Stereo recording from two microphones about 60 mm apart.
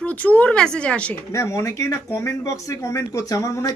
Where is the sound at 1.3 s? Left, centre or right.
Left.